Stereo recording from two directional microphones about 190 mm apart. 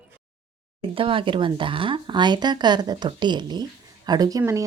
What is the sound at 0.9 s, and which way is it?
Speech, 25° right (ahead or behind).